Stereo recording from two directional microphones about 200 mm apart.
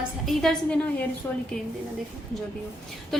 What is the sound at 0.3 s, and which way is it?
Speech, 5° left (ahead or behind).